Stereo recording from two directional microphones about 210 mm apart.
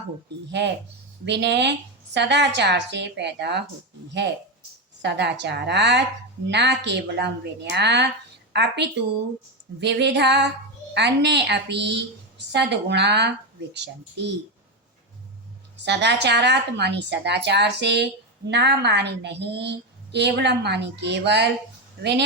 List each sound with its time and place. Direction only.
1.2 s a woman's voice: 55° right (ahead or behind)
5.0 s a woman's voice: 55° right (ahead or behind)
15.8 s a woman's voice: 55° right (ahead or behind)